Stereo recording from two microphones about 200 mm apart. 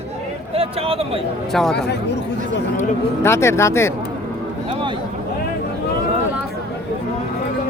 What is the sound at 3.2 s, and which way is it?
Speech, 15° left (ahead or behind).